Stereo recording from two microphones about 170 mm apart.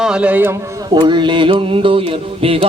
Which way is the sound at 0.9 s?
25° right (ahead or behind).